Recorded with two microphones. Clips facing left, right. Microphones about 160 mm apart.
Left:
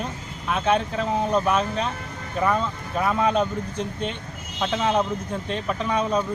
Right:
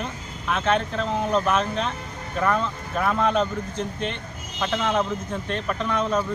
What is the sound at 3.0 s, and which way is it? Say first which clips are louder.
Speech: even; 5° left (ahead or behind).